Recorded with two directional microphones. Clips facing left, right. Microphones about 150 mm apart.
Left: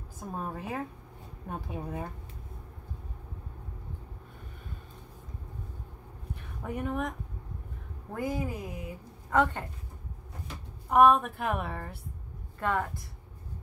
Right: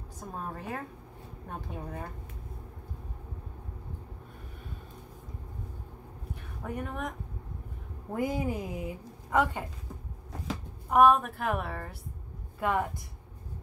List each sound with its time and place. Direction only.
0.2 s a woman's voice: 5° left (ahead or behind)
6.6 s a woman's voice: 5° left (ahead or behind)
8.1 s a woman's voice: 20° right (ahead or behind)
9.3 s speech: 10° right (ahead or behind)
10.9 s a woman's voice: centre (ahead or behind)
12.5 s speech: 15° right (ahead or behind)